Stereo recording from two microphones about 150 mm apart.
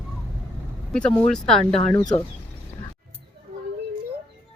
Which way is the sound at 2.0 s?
25° left (ahead or behind).